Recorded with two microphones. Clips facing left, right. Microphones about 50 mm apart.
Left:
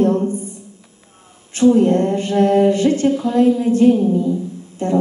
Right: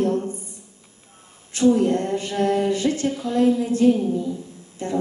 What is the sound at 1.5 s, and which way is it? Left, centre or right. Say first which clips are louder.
A man's voice: left 5 dB; left.